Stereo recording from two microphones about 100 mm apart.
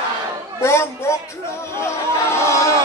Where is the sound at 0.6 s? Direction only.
25° left (ahead or behind).